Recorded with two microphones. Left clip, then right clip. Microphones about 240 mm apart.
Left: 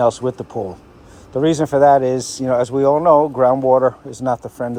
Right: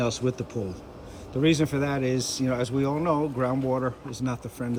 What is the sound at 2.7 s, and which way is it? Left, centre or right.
Speech, left.